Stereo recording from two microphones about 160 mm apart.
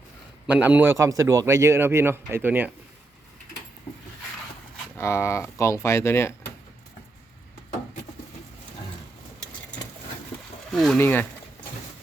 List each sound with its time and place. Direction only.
0.4 s a man's voice: 10° right (ahead or behind)
4.9 s speech: 15° left (ahead or behind)
10.7 s speech: centre (ahead or behind)
10.9 s speech: 10° left (ahead or behind)